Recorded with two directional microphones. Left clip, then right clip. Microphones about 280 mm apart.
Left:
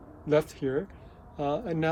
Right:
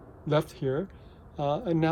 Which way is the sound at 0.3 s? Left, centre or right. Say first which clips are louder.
Left 1 dB; centre.